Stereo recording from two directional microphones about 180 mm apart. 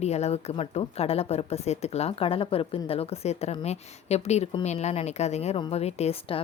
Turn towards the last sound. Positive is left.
turn(degrees=35)  # may be behind; listen again after turning